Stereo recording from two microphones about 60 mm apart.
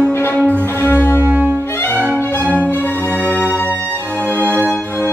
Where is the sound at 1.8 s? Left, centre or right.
Left.